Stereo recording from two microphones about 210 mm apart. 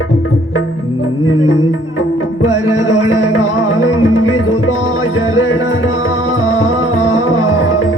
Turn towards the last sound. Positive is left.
turn(degrees=75)  # may be behind; listen again after turning